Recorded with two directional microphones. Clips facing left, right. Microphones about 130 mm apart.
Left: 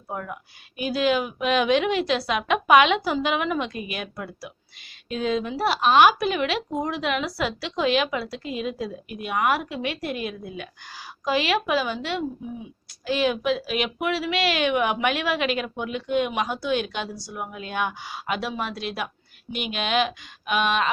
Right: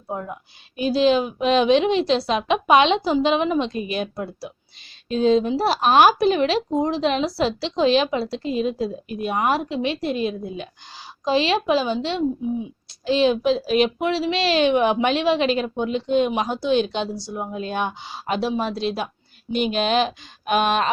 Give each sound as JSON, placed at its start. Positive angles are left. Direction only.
{"t": 0.1, "sound": "a woman's voice", "side_deg": -25}